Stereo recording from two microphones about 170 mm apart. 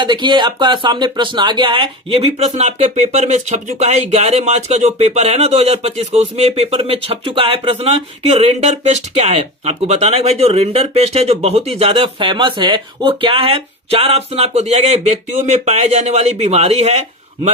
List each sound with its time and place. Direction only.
0.0 s speech: 25° right (ahead or behind)